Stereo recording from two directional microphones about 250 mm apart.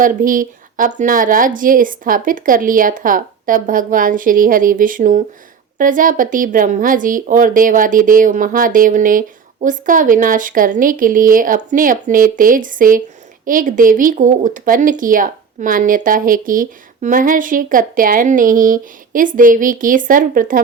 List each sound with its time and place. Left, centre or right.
0.0 s speech: right